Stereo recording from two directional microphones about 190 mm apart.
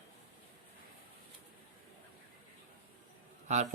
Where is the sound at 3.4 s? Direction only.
35° right (ahead or behind).